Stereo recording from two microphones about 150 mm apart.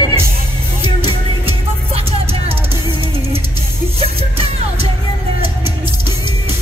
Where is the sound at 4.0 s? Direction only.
40° right (ahead or behind).